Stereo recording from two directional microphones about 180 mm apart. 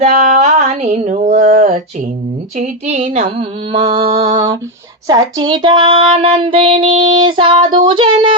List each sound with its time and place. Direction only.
0.0 s mantra: 45° right (ahead or behind)
1.3 s child singing: 40° right (ahead or behind)
3.8 s female singing: 25° right (ahead or behind)